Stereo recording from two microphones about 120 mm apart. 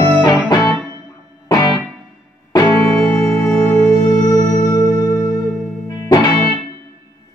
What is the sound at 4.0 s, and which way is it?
Music, 20° left (ahead or behind).